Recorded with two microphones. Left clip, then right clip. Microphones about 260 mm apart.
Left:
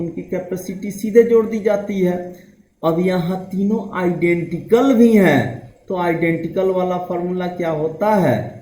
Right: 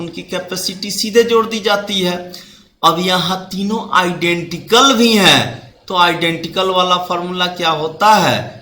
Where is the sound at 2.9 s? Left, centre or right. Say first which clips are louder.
Right 4 dB; right.